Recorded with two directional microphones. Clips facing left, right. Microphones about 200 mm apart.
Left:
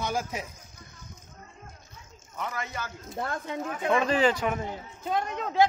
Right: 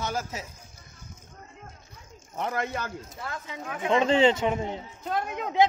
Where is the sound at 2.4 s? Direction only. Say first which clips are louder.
Right 5 dB; 55° right (ahead or behind).